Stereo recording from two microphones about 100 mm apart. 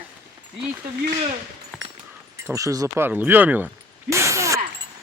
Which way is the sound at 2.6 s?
35° right (ahead or behind).